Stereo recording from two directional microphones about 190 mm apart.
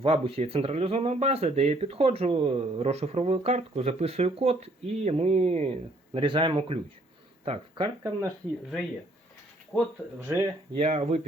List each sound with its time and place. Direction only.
0.0 s speech: 30° right (ahead or behind)
9.7 s speech: centre (ahead or behind)
10.2 s speech: 15° right (ahead or behind)
10.8 s speech: 30° right (ahead or behind)